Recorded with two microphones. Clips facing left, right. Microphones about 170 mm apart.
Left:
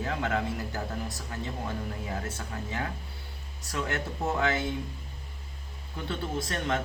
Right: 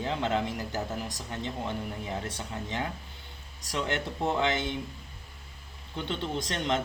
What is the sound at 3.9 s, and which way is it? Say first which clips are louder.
Speech: right 2 dB; 20° right (ahead or behind).